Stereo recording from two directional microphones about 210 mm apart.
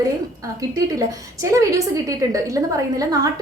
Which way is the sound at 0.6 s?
15° right (ahead or behind).